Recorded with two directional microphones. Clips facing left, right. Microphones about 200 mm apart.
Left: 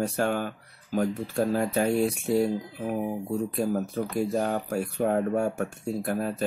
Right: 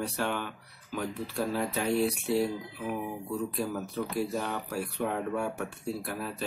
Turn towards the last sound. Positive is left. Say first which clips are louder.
# left 7 dB
turn(degrees=45)  # may be behind; listen again after turning